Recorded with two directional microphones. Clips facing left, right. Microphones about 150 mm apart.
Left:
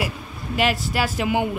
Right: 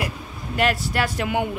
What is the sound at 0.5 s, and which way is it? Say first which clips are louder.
Speech: even; centre (ahead or behind).